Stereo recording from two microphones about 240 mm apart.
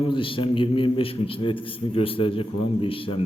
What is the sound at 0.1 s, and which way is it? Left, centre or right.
A man's voice, left.